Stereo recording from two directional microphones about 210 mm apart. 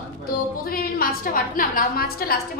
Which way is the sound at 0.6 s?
45° left (ahead or behind).